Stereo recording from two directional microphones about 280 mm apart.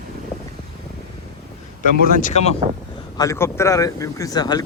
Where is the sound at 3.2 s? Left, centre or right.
Centre.